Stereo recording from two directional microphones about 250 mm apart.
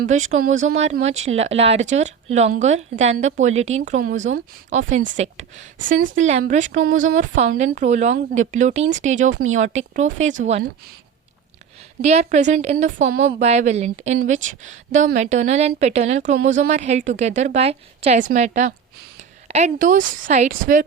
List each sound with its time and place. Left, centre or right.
0.0 s a woman's voice: right
12.0 s a woman's voice: right